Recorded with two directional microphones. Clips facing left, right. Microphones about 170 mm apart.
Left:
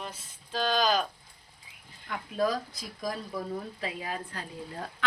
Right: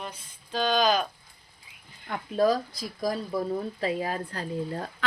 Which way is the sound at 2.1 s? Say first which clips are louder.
Right 5 dB; 35° right (ahead or behind).